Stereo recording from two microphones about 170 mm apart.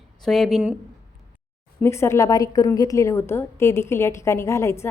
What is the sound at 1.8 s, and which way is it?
A woman's voice, 15° left (ahead or behind).